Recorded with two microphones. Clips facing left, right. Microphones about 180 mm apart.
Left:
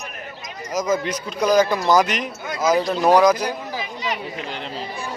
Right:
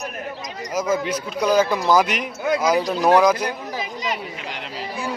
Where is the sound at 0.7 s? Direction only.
10° right (ahead or behind).